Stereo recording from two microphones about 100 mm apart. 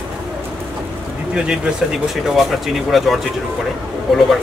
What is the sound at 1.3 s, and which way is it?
Speech, 10° right (ahead or behind).